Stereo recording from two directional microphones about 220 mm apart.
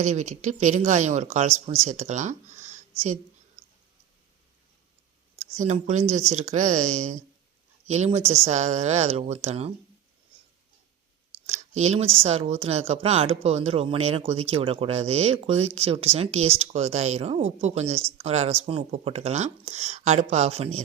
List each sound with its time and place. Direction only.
0.0 s speech: 30° right (ahead or behind)
5.4 s speech: 30° right (ahead or behind)
11.8 s speech: 30° right (ahead or behind)